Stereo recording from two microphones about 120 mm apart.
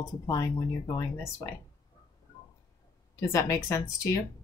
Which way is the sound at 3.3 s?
25° left (ahead or behind).